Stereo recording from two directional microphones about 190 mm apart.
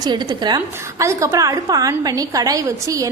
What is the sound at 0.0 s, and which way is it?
A woman's voice, 20° right (ahead or behind).